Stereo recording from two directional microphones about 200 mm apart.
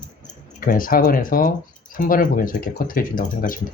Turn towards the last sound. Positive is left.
turn(degrees=45)  # may be behind; listen again after turning